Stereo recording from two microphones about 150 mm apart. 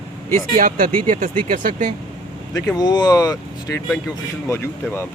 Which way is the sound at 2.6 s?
25° left (ahead or behind).